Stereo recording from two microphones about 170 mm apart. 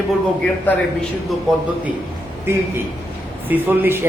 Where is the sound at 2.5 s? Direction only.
15° right (ahead or behind).